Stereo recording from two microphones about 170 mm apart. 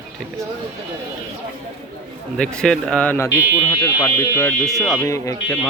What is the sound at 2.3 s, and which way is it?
Speech, 5° left (ahead or behind).